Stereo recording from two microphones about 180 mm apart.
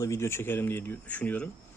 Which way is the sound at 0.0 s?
15° left (ahead or behind).